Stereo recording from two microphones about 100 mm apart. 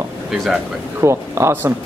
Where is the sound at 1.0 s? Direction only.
30° right (ahead or behind).